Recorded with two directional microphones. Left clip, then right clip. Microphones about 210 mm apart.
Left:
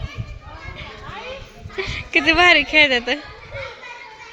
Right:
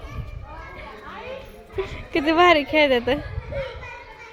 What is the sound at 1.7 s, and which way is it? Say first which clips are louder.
Speech: left 6 dB; 10° right (ahead or behind).